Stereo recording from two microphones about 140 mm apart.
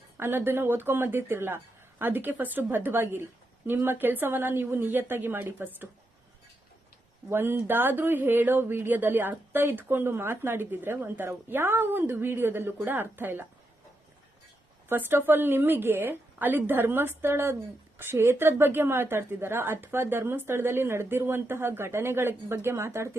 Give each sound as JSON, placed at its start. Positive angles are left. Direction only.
{"t": 0.2, "sound": "a woman's voice", "side_deg": -15}
{"t": 7.3, "sound": "a woman's voice", "side_deg": -15}
{"t": 14.8, "sound": "a woman's voice", "side_deg": -15}